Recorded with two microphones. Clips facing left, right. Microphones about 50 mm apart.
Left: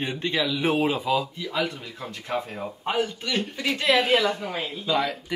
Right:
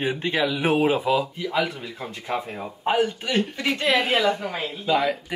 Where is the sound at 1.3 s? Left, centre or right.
Right.